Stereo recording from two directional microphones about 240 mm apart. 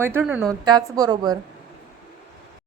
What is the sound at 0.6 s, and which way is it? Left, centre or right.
Speech, centre.